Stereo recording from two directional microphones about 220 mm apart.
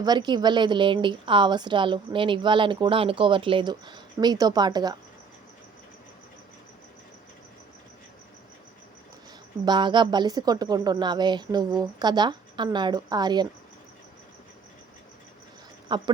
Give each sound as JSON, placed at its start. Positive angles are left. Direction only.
{"t": 0.0, "sound": "a woman's voice", "side_deg": -20}
{"t": 9.6, "sound": "a woman's voice", "side_deg": -20}
{"t": 15.9, "sound": "a woman's voice", "side_deg": -20}